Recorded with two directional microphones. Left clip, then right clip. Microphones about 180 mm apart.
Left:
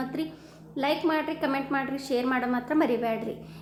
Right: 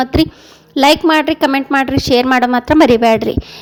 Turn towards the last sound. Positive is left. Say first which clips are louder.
# right 17 dB
turn(degrees=-60)  # may be behind; listen again after turning